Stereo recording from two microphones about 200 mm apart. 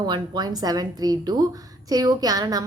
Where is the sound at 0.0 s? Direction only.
20° right (ahead or behind).